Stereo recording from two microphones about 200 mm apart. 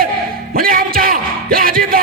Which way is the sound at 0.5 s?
45° right (ahead or behind).